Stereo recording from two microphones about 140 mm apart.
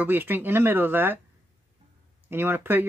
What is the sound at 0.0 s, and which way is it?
Speech, 15° right (ahead or behind).